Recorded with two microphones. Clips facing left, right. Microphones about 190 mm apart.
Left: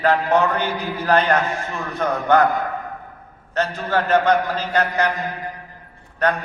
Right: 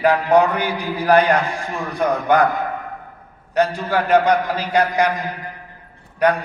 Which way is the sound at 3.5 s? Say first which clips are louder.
Right 3 dB; 10° right (ahead or behind).